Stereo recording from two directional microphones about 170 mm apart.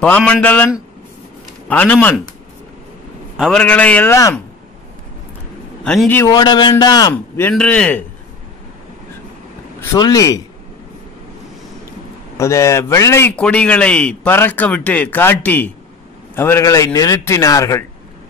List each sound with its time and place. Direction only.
0.0 s a man's voice: 5° left (ahead or behind)
1.7 s a man's voice: 10° left (ahead or behind)
3.3 s a man's voice: 5° left (ahead or behind)
5.9 s a man's voice: 10° left (ahead or behind)
9.9 s a man's voice: 20° left (ahead or behind)
12.4 s a man's voice: 15° left (ahead or behind)